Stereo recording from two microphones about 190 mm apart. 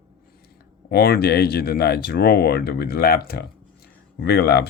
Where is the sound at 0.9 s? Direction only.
55° left (ahead or behind).